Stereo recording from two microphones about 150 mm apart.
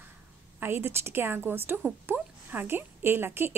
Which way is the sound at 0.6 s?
15° right (ahead or behind).